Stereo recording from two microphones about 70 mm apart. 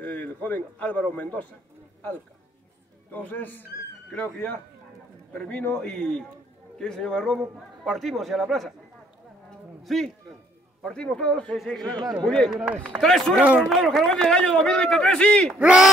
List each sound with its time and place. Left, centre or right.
0.0 s a man's voice: left
3.1 s a man's voice: left
5.7 s a man's voice: centre
9.8 s a man's voice: centre
11.5 s a man's voice: centre
11.8 s speech: right
12.2 s a man's voice: centre
12.4 s speech: centre
13.0 s a man's voice: centre
15.6 s speech: centre